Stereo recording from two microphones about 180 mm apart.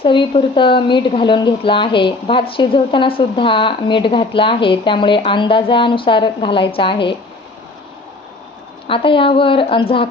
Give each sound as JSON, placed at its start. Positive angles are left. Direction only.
{"t": 0.0, "sound": "speech", "side_deg": 30}
{"t": 8.9, "sound": "speech", "side_deg": 30}